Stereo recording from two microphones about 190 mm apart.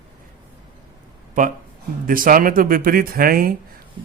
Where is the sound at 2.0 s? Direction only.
45° right (ahead or behind).